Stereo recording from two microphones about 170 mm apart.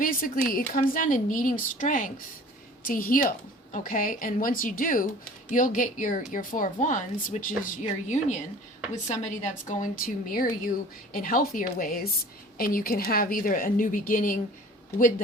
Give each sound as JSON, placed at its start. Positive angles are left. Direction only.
{"t": 0.0, "sound": "a woman's voice", "side_deg": 55}